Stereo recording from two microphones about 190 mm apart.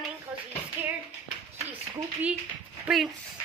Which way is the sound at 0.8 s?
10° right (ahead or behind).